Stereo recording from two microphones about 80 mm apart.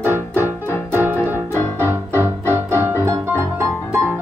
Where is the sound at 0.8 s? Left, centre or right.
Right.